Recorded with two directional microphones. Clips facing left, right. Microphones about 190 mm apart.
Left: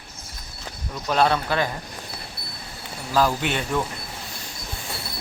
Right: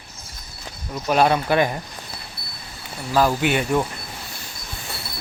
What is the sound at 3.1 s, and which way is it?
Speech, 5° right (ahead or behind).